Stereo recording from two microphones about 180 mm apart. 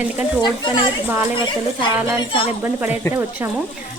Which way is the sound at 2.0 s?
15° right (ahead or behind).